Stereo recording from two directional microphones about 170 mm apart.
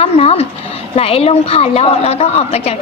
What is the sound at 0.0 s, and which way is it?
A woman's voice, 35° left (ahead or behind).